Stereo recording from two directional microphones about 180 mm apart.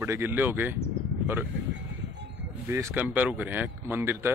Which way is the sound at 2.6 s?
15° right (ahead or behind).